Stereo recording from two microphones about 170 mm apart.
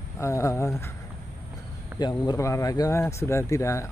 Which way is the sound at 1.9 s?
25° left (ahead or behind).